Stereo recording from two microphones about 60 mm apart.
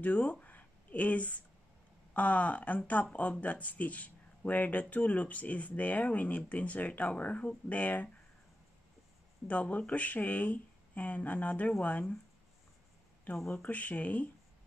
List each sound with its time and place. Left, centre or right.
0.0 s speech: left
9.5 s speech: left
13.5 s speech: left